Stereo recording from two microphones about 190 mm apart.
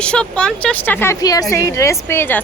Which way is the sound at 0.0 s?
5° left (ahead or behind).